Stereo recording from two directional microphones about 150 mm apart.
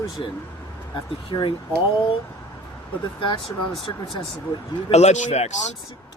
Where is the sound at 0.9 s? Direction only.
30° left (ahead or behind).